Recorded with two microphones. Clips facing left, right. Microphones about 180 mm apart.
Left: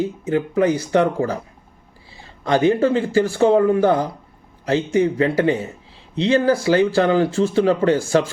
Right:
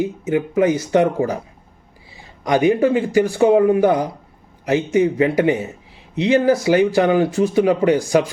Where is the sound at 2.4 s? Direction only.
15° right (ahead or behind).